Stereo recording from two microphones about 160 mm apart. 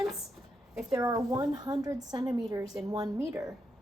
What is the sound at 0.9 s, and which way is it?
A woman's voice, 20° right (ahead or behind).